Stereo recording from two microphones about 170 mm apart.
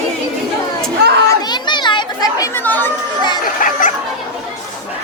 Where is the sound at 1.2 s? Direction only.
25° left (ahead or behind).